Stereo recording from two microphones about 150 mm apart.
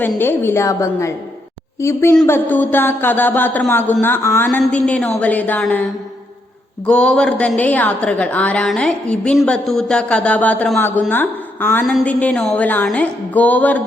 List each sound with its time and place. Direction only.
0.0 s a woman's voice: 15° left (ahead or behind)